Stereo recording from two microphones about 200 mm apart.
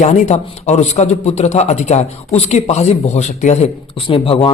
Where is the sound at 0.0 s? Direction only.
35° left (ahead or behind).